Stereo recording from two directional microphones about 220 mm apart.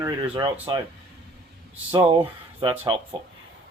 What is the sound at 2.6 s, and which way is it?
Speech, 25° right (ahead or behind).